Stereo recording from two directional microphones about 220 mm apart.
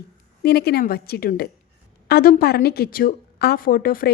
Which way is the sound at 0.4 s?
45° left (ahead or behind).